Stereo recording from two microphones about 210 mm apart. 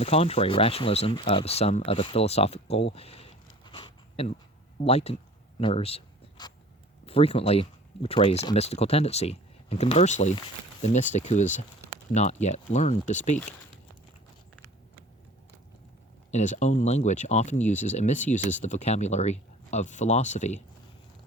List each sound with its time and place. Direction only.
0.0 s speech: 25° left (ahead or behind)
4.8 s writing: 30° left (ahead or behind)
7.0 s speech: 30° left (ahead or behind)
16.3 s speech: 35° left (ahead or behind)